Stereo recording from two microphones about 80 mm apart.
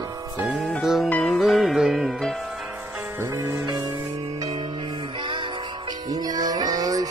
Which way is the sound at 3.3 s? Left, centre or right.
Right.